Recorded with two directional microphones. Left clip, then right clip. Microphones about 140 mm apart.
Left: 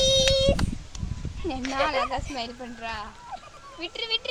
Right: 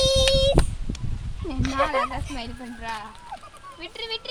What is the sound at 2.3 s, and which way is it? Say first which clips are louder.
Speech: left 2 dB; 90° left.